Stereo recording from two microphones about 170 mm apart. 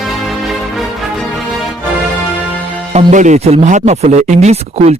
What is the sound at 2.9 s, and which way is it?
A man's voice, 45° right (ahead or behind).